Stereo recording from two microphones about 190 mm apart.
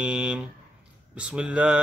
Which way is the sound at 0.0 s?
5° right (ahead or behind).